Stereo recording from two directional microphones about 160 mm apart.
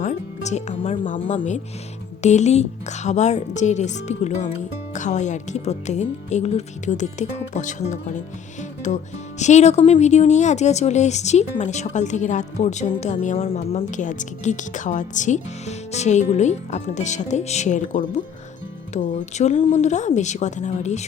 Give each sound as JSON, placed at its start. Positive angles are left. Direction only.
{"t": 0.0, "sound": "speech", "side_deg": 45}
{"t": 2.2, "sound": "speech", "side_deg": 45}
{"t": 13.9, "sound": "speech", "side_deg": 50}